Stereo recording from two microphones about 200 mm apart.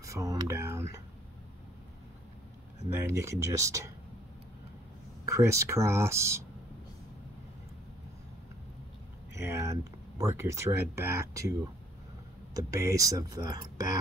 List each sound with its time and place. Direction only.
0.0 s speech: 15° right (ahead or behind)
2.9 s speech: 15° right (ahead or behind)
5.2 s speech: 15° right (ahead or behind)
9.3 s speech: 15° right (ahead or behind)
12.5 s speech: 15° right (ahead or behind)